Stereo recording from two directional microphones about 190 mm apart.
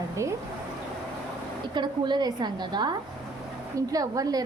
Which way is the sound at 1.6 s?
25° right (ahead or behind).